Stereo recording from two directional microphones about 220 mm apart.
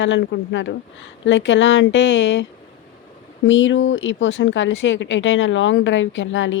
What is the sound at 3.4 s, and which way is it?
Speech, 60° left (ahead or behind).